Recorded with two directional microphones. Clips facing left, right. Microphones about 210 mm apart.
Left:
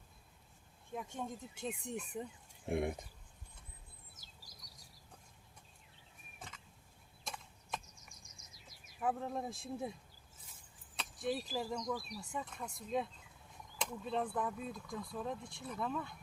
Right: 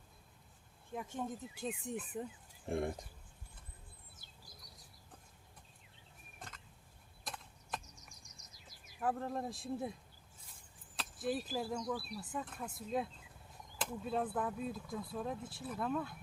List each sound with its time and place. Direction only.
0.9 s speech: centre (ahead or behind)
2.6 s speech: 15° left (ahead or behind)
6.4 s a sound: centre (ahead or behind)
9.0 s speech: centre (ahead or behind)